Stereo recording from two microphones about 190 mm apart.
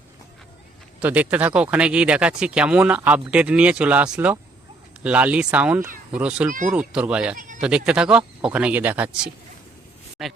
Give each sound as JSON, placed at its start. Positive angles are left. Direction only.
{"t": 0.9, "sound": "speech", "side_deg": -10}
{"t": 6.5, "sound": "speech", "side_deg": -45}
{"t": 6.7, "sound": "speech", "side_deg": -5}
{"t": 7.3, "sound": "bleat", "side_deg": -45}
{"t": 7.9, "sound": "speech", "side_deg": -5}